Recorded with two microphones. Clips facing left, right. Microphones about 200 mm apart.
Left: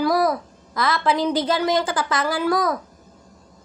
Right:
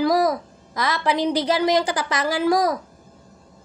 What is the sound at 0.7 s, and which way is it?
A woman's voice, 15° right (ahead or behind).